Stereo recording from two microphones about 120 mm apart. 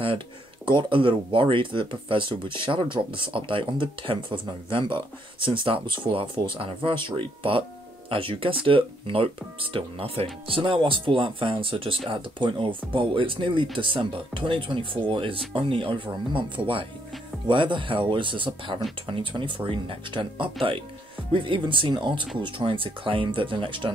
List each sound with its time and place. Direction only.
0.7 s speech: 45° right (ahead or behind)